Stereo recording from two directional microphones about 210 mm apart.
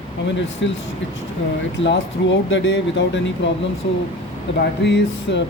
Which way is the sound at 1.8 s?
60° left (ahead or behind).